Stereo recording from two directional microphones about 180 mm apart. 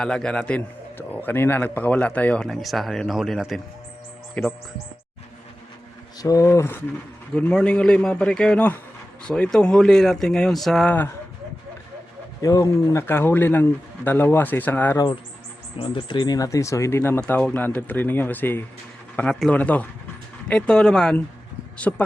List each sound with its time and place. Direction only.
0.0 s a man's voice: 5° left (ahead or behind)
6.1 s a man's voice: 20° left (ahead or behind)
12.4 s speech: 20° left (ahead or behind)
15.8 s a man's voice: 30° left (ahead or behind); by 22.0 s 10° left (ahead or behind)